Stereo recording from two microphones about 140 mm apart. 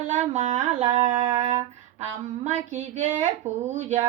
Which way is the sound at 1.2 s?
45° right (ahead or behind).